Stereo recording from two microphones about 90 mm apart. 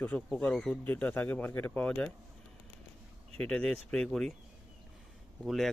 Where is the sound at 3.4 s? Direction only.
10° left (ahead or behind).